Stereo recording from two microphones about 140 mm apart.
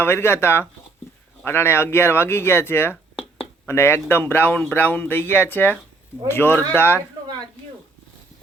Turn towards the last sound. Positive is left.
turn(degrees=15)  # may be behind; listen again after turning